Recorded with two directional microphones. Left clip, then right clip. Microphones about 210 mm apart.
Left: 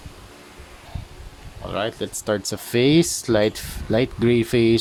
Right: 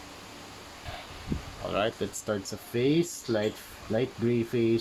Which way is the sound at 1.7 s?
25° left (ahead or behind).